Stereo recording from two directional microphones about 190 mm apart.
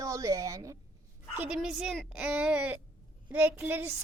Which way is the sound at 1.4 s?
5° right (ahead or behind).